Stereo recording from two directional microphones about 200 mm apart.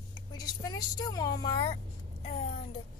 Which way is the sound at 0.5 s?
20° left (ahead or behind).